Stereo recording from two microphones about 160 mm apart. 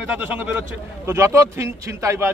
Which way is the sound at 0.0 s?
10° right (ahead or behind).